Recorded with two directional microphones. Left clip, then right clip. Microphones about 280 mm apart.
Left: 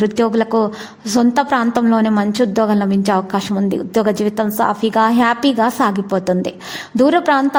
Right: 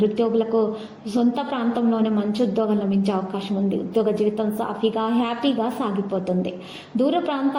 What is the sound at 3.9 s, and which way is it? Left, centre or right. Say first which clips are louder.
A woman's voice: left 5 dB; left.